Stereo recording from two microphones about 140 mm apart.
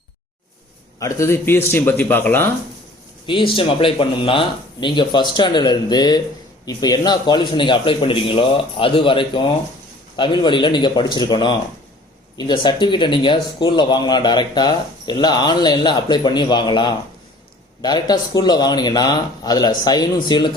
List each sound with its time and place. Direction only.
0.9 s speech: 20° left (ahead or behind)
3.2 s speech: 40° left (ahead or behind)